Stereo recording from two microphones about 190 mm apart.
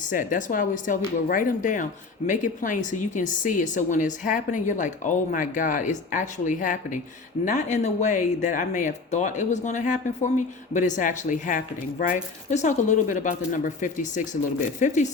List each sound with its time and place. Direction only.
0.1 s speech: 45° left (ahead or behind)